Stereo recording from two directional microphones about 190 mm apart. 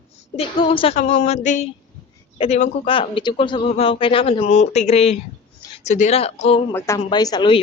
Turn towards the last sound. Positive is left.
turn(degrees=25)  # may be behind; listen again after turning